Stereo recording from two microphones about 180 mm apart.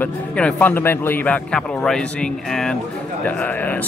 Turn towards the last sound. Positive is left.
turn(degrees=10)  # may be behind; listen again after turning